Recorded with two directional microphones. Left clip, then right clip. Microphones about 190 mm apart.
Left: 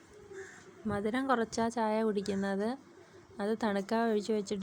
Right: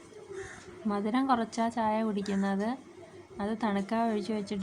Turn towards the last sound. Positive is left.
turn(degrees=30)  # may be behind; listen again after turning